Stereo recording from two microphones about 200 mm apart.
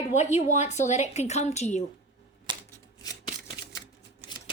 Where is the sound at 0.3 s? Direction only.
35° left (ahead or behind).